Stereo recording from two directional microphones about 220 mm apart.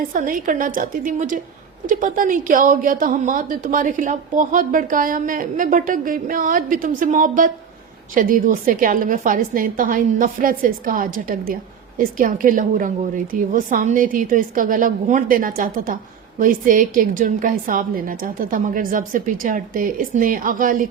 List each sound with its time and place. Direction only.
0.1 s a woman's voice: 35° right (ahead or behind)